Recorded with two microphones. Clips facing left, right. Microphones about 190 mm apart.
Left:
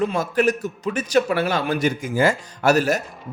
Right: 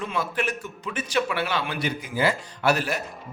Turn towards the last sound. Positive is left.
turn(degrees=45)  # may be behind; listen again after turning